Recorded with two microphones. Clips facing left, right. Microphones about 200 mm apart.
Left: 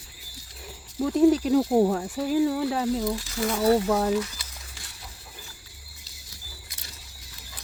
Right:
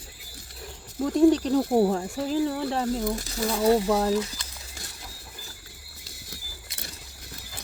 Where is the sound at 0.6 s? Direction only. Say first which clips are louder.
Left 1 dB; 5° left (ahead or behind).